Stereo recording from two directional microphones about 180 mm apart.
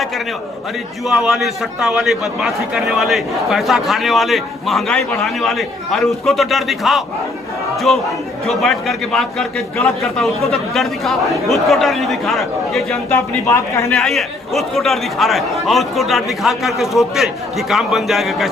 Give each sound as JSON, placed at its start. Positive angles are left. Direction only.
{"t": 1.0, "sound": "a man's voice", "side_deg": 0}
{"t": 13.1, "sound": "a man's voice", "side_deg": 15}
{"t": 13.9, "sound": "a man's voice", "side_deg": 0}